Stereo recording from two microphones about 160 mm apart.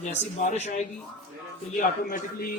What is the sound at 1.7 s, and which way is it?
Speech, 60° left (ahead or behind).